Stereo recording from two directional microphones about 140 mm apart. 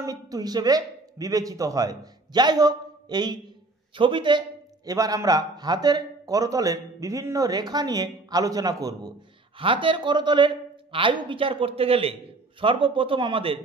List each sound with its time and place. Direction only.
0.0 s a man's voice: 25° right (ahead or behind)
9.6 s speech: 40° right (ahead or behind)